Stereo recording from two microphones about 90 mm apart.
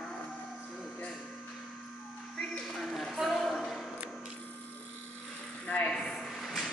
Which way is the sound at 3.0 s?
5° left (ahead or behind).